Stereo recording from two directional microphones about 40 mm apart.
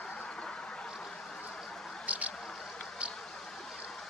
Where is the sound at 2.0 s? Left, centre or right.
Right.